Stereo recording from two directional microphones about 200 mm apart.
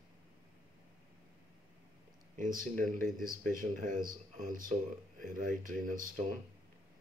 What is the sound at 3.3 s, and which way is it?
Speech, 40° right (ahead or behind).